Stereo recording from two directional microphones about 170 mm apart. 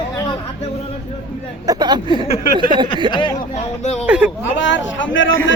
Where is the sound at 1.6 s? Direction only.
25° right (ahead or behind).